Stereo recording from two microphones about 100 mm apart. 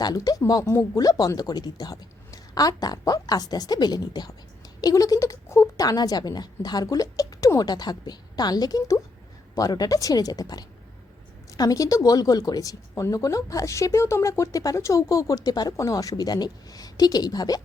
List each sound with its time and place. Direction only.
0.0 s speech: 40° left (ahead or behind)